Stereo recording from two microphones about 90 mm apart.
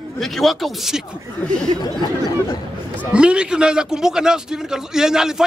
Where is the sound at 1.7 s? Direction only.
85° right.